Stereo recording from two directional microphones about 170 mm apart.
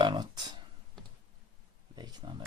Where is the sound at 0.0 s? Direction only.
25° right (ahead or behind).